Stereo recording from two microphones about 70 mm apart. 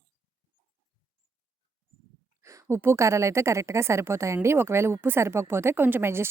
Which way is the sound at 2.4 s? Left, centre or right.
Right.